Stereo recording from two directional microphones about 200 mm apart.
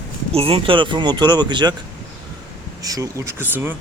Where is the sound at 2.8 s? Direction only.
15° right (ahead or behind).